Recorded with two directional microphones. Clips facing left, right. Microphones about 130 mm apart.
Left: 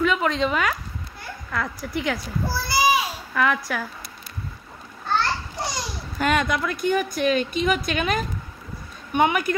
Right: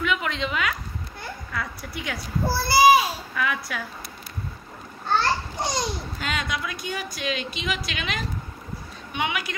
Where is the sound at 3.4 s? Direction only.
55° left (ahead or behind).